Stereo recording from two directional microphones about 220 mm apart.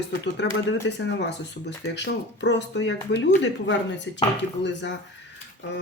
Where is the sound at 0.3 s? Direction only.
55° left (ahead or behind).